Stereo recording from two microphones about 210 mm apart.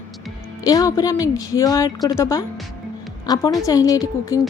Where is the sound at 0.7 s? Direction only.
15° left (ahead or behind).